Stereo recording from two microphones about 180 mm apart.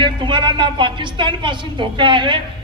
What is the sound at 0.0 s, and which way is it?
A woman's voice, 25° right (ahead or behind).